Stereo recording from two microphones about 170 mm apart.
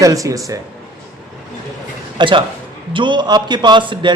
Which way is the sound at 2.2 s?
30° right (ahead or behind).